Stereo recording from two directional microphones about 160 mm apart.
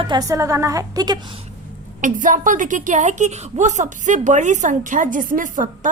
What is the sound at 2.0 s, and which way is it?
A woman's voice, 55° right (ahead or behind).